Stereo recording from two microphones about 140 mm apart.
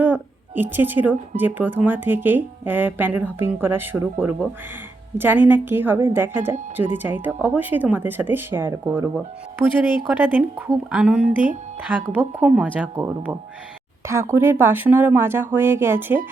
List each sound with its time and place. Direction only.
0.0 s music: 15° right (ahead or behind)
1.4 s a woman's voice: 15° right (ahead or behind)
14.1 s a woman's voice: 20° right (ahead or behind)